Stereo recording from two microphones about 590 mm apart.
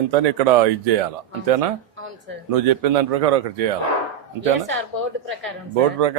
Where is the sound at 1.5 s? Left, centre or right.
Right.